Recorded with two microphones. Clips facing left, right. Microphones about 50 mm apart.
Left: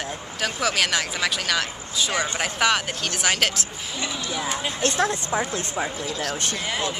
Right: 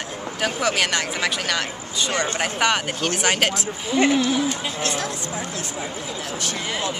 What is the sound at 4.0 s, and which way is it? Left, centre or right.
Speech, right.